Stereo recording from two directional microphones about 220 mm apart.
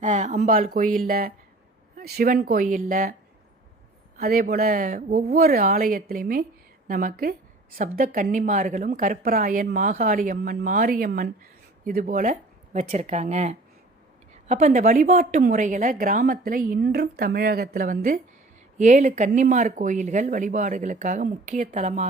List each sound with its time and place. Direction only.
0.0 s a woman's voice: 35° right (ahead or behind)
4.2 s a woman's voice: 45° right (ahead or behind)